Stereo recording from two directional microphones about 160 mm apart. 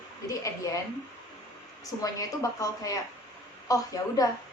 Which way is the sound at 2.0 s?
20° left (ahead or behind).